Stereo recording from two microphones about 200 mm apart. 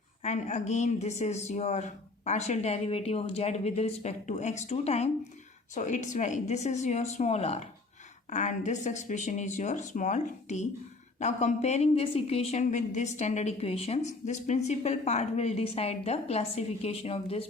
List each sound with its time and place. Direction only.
0.2 s a woman's voice: 35° left (ahead or behind)